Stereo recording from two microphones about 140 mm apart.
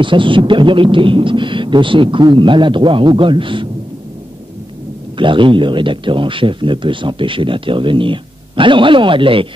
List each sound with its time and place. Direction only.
0.0 s a man's voice: 35° right (ahead or behind)
5.1 s a man's voice: 35° right (ahead or behind)